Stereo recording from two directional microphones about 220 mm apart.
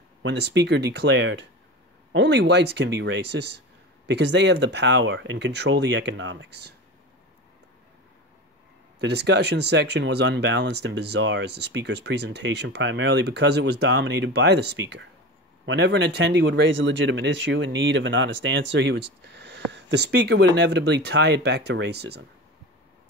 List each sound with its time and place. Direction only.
0.2 s speech: 50° right (ahead or behind)
9.0 s speech: 50° right (ahead or behind)